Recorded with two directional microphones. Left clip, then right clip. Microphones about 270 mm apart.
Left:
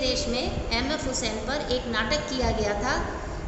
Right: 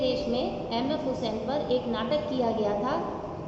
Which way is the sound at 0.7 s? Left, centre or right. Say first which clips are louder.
Left 1 dB; left.